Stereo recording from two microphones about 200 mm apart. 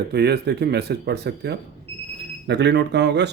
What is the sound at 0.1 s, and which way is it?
Speech, 55° right (ahead or behind).